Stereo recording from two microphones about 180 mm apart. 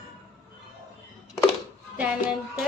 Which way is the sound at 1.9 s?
5° right (ahead or behind).